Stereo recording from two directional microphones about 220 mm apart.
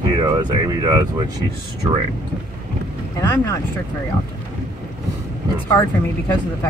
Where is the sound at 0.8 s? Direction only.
20° right (ahead or behind).